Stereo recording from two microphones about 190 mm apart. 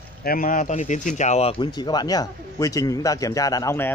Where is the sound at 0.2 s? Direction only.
50° left (ahead or behind).